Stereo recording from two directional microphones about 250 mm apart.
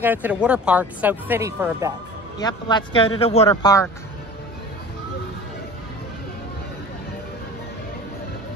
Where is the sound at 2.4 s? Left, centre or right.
Centre.